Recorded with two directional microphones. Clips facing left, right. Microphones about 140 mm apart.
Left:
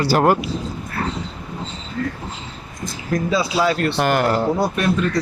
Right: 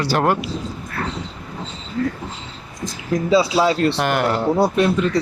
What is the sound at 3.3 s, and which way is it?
Speech, 30° right (ahead or behind).